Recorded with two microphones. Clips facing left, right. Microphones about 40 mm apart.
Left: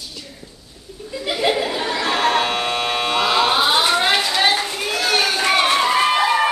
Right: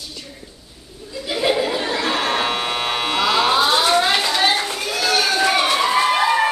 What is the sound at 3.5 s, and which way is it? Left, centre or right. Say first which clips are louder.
Fire alarm: right 1 dB; centre.